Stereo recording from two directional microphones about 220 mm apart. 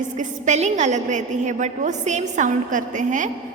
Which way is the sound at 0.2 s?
30° right (ahead or behind).